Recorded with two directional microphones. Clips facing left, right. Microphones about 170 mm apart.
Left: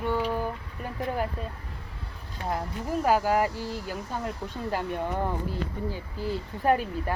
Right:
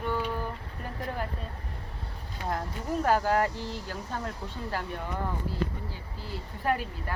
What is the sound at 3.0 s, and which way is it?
Speech, 10° left (ahead or behind).